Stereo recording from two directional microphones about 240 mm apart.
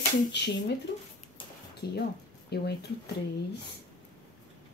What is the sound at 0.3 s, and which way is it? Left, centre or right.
Speech, left.